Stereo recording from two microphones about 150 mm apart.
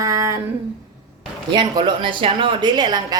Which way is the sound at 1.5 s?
30° right (ahead or behind).